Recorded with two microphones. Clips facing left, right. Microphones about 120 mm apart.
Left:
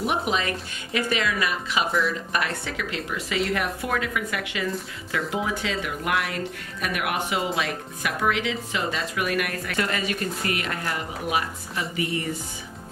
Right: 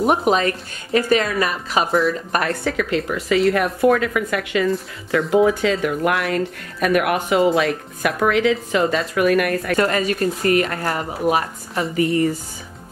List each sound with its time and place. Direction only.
0.0 s speech: 45° right (ahead or behind)